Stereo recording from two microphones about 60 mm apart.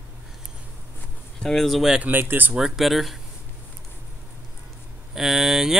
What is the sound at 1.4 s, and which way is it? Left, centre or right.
Speech, centre.